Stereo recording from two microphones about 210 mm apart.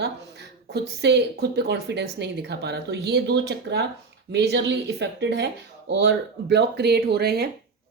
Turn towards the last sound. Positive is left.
turn(degrees=-50)  # may be behind; listen again after turning